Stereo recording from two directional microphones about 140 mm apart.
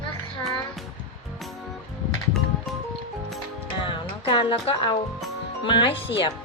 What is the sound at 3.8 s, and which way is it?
Music, 35° left (ahead or behind).